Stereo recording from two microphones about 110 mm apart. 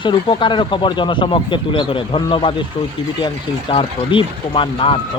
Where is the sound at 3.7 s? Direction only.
50° left (ahead or behind).